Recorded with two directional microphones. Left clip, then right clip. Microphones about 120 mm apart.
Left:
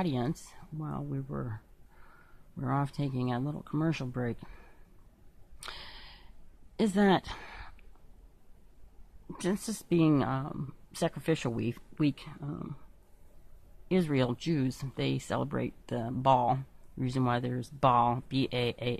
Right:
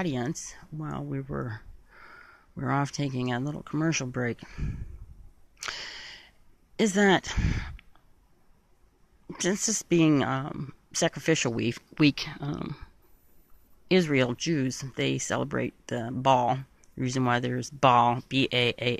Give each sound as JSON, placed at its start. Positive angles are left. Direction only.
{"t": 0.0, "sound": "speech", "side_deg": -15}
{"t": 0.7, "sound": "speech", "side_deg": -35}
{"t": 2.8, "sound": "speech", "side_deg": -25}
{"t": 5.6, "sound": "a sound", "side_deg": -25}
{"t": 6.8, "sound": "speech", "side_deg": -25}
{"t": 9.3, "sound": "speech", "side_deg": -30}
{"t": 11.9, "sound": "speech", "side_deg": -65}
{"t": 14.0, "sound": "speech", "side_deg": -20}